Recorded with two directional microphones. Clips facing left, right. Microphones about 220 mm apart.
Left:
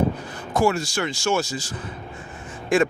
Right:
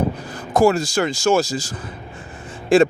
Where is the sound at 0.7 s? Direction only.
40° right (ahead or behind).